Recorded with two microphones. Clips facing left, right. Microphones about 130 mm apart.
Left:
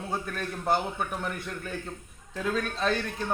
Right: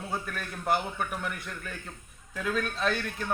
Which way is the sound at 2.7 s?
30° left (ahead or behind).